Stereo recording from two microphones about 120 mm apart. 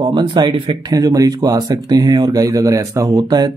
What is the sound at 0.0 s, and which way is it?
Speech, 40° right (ahead or behind).